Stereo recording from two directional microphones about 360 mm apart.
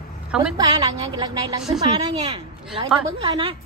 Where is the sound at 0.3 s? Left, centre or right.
Centre.